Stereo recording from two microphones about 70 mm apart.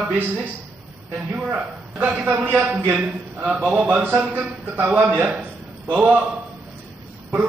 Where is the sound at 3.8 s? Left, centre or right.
Right.